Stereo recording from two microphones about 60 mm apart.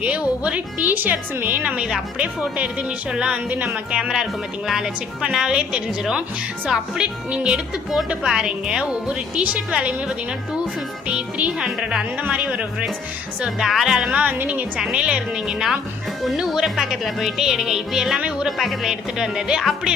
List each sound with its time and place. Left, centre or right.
0.0 s speech: centre
1.6 s speech: centre
11.1 s speech: centre
13.7 s speech: centre
14.2 s speech: right
14.8 s speech: centre
18.4 s speech: centre